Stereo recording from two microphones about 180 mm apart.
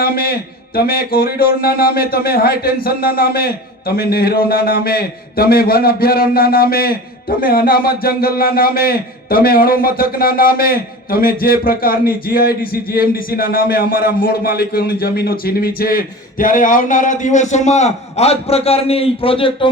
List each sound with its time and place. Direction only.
0.0 s speech: 60° left (ahead or behind); by 19.6 s 30° left (ahead or behind)